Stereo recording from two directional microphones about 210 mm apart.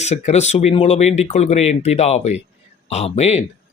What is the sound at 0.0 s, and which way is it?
Speech, 30° left (ahead or behind).